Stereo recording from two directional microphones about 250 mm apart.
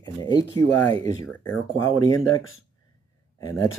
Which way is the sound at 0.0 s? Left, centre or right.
Centre.